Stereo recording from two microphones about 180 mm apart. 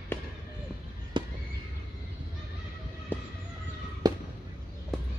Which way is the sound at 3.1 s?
10° left (ahead or behind).